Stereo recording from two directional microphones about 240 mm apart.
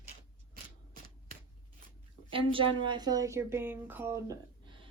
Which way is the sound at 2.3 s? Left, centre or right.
Right.